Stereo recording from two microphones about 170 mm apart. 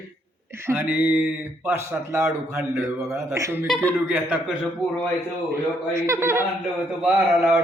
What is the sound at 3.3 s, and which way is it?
Speech, 20° right (ahead or behind).